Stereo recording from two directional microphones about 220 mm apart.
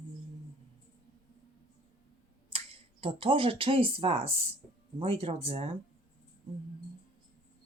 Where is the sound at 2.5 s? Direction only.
25° right (ahead or behind).